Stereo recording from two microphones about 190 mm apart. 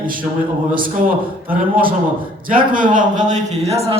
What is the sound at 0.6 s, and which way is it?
A man's voice, 45° right (ahead or behind).